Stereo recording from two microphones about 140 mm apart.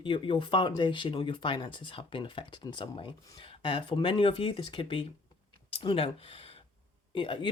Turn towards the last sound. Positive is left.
turn(degrees=40)  # may be behind; listen again after turning